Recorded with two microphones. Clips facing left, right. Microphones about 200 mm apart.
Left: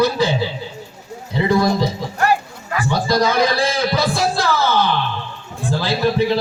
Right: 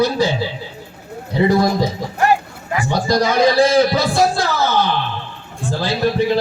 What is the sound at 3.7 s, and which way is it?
Music, 50° right (ahead or behind).